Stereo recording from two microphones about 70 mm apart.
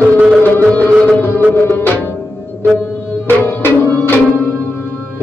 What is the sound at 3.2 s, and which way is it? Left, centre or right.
Music, left.